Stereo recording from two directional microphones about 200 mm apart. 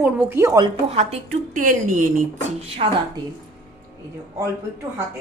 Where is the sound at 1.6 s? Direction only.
40° right (ahead or behind).